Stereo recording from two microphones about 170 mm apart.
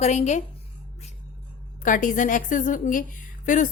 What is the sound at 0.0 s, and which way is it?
Speech, 40° left (ahead or behind).